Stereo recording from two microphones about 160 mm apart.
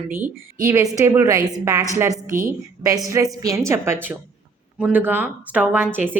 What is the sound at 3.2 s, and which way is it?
A woman's voice, 15° right (ahead or behind).